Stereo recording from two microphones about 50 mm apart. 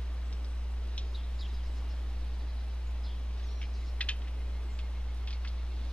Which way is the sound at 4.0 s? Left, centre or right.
Left.